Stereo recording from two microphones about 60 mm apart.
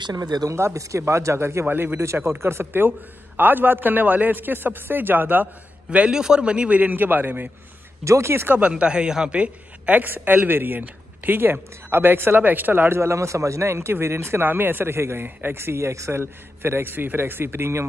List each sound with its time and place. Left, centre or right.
0.1 s speech: right
0.6 s a man's voice: right
1.7 s a woman's voice: right
2.2 s a woman's voice: right
5.9 s a man's voice: centre
8.0 s speech: right
8.3 s a woman's voice: right
8.5 s a woman's voice: centre
12.9 s a man's voice: right
14.5 s a woman's voice: right